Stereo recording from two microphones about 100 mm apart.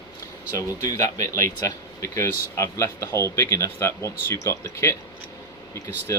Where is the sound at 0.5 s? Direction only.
35° left (ahead or behind).